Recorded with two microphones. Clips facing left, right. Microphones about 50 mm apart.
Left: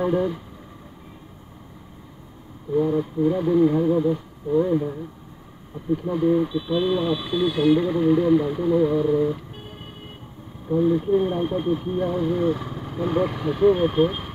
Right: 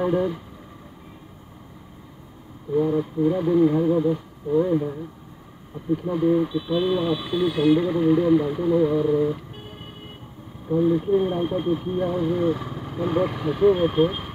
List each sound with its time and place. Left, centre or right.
0.0 s speech: centre
2.7 s speech: centre